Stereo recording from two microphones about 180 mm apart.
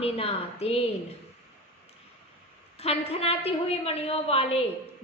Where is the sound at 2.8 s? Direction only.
35° left (ahead or behind).